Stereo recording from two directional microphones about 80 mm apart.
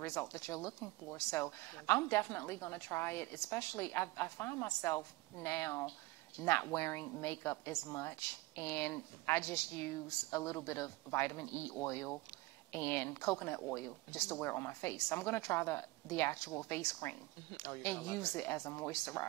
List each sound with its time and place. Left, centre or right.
0.0 s a woman's voice: left